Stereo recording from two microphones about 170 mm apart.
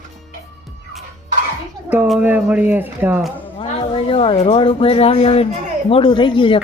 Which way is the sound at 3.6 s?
30° left (ahead or behind).